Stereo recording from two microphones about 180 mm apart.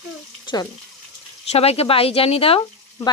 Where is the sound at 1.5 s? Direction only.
35° left (ahead or behind).